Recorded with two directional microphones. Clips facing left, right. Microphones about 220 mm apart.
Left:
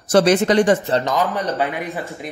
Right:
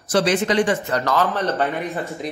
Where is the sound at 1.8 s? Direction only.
Centre (ahead or behind).